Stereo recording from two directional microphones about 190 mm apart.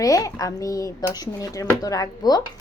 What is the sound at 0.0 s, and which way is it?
A woman's voice, 15° left (ahead or behind).